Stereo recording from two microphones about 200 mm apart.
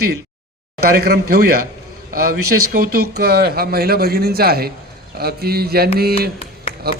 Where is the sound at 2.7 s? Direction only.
50° right (ahead or behind).